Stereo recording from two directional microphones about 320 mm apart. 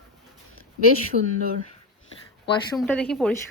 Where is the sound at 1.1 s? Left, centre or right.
Right.